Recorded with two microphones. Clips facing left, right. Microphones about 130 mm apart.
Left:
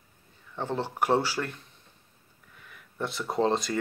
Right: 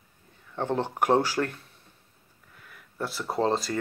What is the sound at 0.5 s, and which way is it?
Speech, 15° right (ahead or behind).